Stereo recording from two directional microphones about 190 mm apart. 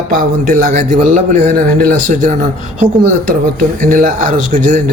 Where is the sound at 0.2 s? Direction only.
45° right (ahead or behind).